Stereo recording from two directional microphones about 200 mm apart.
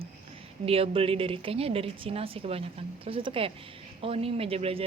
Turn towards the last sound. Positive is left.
turn(degrees=-30)  # may be behind; listen again after turning